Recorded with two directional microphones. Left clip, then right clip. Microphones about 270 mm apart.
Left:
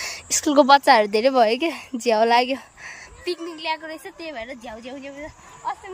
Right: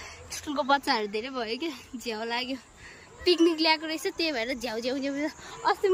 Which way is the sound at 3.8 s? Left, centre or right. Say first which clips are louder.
Right 4 dB; centre.